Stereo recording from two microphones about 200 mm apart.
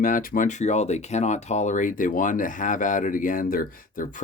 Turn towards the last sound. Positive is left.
turn(degrees=45)  # may be behind; listen again after turning